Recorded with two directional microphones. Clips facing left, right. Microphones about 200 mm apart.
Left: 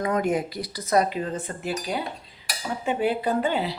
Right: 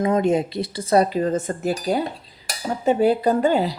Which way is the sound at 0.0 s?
25° right (ahead or behind).